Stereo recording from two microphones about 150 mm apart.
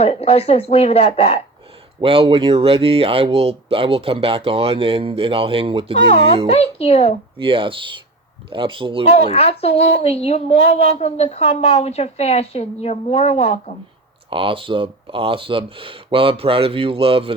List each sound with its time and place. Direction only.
0.0 s a woman's voice: 45° left (ahead or behind)
2.0 s speech: 35° right (ahead or behind)
6.1 s a woman's voice: 45° left (ahead or behind)
7.3 s speech: 35° right (ahead or behind)
9.0 s a woman's voice: 45° left (ahead or behind)
14.3 s speech: 35° right (ahead or behind)